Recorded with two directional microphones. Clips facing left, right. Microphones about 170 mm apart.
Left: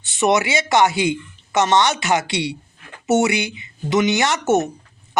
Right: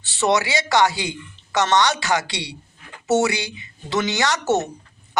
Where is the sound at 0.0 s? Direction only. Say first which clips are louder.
Left 2 dB; 20° left (ahead or behind).